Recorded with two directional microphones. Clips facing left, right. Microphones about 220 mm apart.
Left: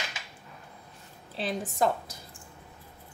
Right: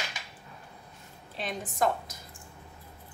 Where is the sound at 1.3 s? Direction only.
30° left (ahead or behind).